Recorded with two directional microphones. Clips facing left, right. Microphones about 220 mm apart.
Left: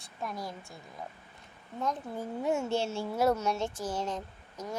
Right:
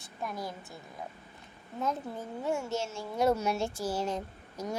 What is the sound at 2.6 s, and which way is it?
Speech, 30° left (ahead or behind).